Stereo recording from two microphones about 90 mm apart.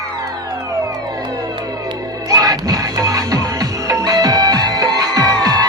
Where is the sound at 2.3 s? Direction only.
45° right (ahead or behind).